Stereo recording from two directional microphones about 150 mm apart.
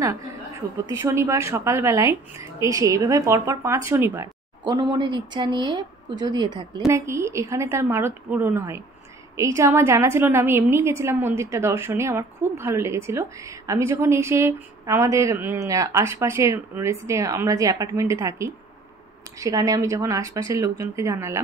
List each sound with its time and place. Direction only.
0.8 s a woman's voice: 20° right (ahead or behind)